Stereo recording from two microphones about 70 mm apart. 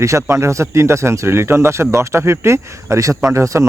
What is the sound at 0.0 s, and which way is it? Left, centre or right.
Speech, right.